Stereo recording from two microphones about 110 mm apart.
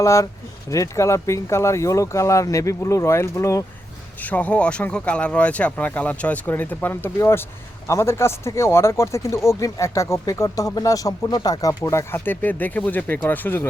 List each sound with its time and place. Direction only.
0.0 s speech: 30° left (ahead or behind)
4.2 s speech: 15° left (ahead or behind); by 11.8 s 35° left (ahead or behind)
11.8 s speech: 25° left (ahead or behind)